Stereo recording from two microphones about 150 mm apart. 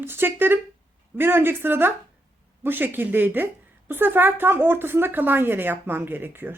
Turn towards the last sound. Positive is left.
turn(degrees=-15)  # may be behind; listen again after turning